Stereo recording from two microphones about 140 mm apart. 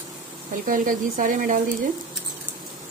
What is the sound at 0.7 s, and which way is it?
Speech, 75° right (ahead or behind).